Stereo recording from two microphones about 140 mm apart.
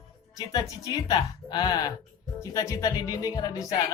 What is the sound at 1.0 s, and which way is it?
Music, 30° left (ahead or behind).